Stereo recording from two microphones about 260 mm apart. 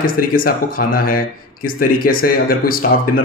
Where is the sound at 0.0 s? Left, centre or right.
Left.